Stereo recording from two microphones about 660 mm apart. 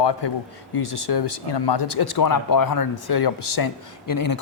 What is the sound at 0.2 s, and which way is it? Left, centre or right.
A man's voice, left.